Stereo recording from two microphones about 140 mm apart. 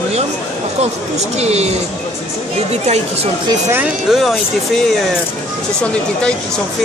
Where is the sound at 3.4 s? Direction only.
20° right (ahead or behind).